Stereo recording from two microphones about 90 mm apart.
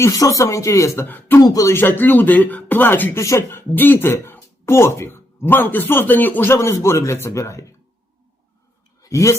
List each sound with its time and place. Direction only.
0.0 s speech: 40° left (ahead or behind)
1.0 s speech: 20° left (ahead or behind)
1.4 s speech: 40° left (ahead or behind)
1.7 s speech: 25° left (ahead or behind)
9.0 s a sound: 35° left (ahead or behind)